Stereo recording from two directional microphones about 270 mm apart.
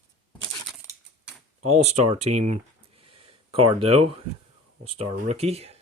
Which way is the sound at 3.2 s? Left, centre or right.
Right.